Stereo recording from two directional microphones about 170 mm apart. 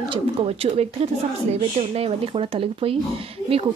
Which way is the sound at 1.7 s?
35° right (ahead or behind).